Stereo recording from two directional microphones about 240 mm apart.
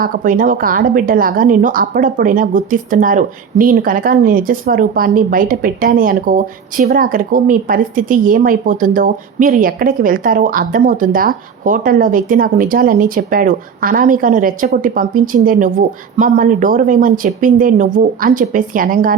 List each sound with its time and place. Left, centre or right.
0.0 s a woman's voice: right